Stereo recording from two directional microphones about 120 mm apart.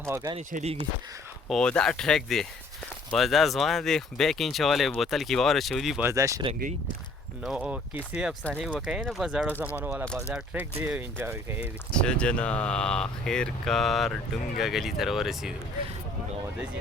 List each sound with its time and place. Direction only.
0.0 s speech: 20° right (ahead or behind)
0.3 s speech: 60° right (ahead or behind)
1.5 s speech: 5° left (ahead or behind)
6.0 s speech: 25° right (ahead or behind)
7.4 s speech: 10° right (ahead or behind)
11.9 s speech: 10° left (ahead or behind)